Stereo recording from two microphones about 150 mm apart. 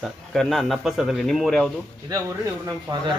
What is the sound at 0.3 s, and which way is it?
A man's voice, centre (ahead or behind).